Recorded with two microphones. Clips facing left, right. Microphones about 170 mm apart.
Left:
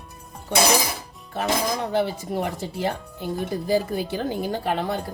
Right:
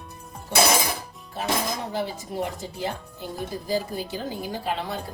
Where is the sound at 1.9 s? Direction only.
65° left (ahead or behind).